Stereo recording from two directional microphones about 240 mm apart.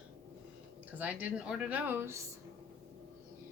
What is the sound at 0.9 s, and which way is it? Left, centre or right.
A woman's voice, centre.